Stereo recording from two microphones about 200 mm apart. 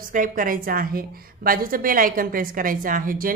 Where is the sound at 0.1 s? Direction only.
45° right (ahead or behind).